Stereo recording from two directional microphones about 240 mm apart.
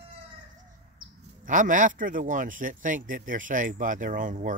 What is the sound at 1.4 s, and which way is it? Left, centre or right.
Speech, right.